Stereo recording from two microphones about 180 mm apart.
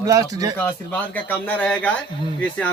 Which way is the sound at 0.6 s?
10° left (ahead or behind).